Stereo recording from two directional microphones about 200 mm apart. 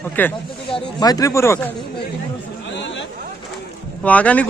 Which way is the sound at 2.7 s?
65° left (ahead or behind).